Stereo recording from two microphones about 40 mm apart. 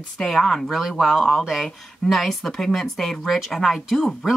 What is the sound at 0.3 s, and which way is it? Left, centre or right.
Speech, centre.